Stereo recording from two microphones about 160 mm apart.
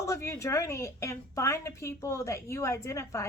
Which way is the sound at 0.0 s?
20° left (ahead or behind).